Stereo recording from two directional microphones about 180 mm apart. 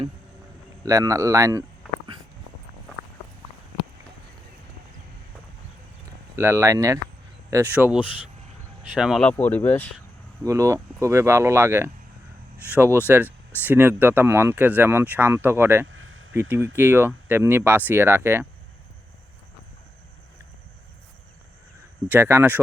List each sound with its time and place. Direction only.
0.9 s speech: 15° right (ahead or behind)
6.3 s speech: 15° right (ahead or behind)
9.0 s speech: centre (ahead or behind)
9.3 s speech: 10° left (ahead or behind)
10.4 s speech: 15° right (ahead or behind)
15.9 s a sound: 90° right
16.3 s speech: 15° right (ahead or behind)
22.1 s speech: 10° right (ahead or behind)